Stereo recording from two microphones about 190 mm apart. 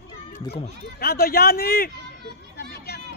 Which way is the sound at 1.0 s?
55° left (ahead or behind).